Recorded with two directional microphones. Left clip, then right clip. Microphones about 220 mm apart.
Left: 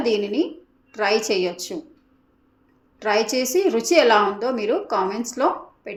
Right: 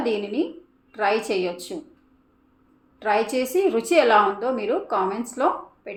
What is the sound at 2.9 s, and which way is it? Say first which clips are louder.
A woman's voice: left 1 dB; 15° left (ahead or behind).